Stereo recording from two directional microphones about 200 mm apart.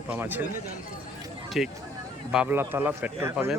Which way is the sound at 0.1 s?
10° right (ahead or behind).